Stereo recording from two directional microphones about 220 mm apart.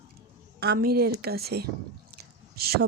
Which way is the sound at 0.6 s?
45° right (ahead or behind).